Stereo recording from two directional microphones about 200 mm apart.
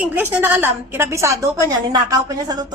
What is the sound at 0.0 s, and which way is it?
A woman's voice, 10° right (ahead or behind).